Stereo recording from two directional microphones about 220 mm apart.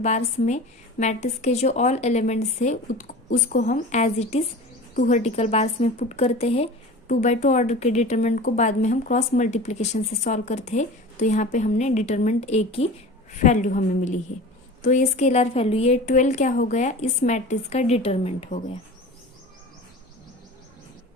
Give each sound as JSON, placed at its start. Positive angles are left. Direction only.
{"t": 0.0, "sound": "a woman's voice", "side_deg": 30}